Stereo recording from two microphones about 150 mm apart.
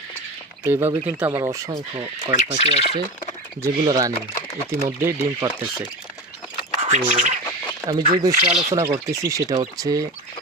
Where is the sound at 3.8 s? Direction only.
25° right (ahead or behind).